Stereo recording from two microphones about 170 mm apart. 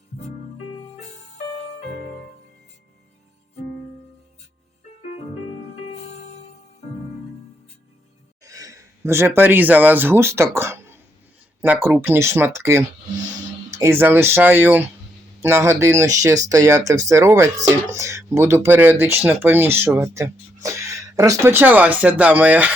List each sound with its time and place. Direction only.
8.4 s speech: 20° right (ahead or behind)